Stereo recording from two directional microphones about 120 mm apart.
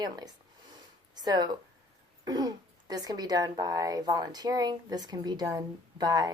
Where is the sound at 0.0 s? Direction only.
35° right (ahead or behind).